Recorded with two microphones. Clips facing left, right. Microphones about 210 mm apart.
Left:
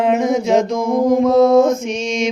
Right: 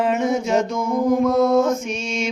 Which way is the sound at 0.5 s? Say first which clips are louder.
Left 4 dB; 90° left.